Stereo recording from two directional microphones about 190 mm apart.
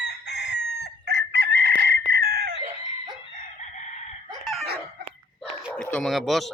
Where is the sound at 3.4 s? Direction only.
40° left (ahead or behind).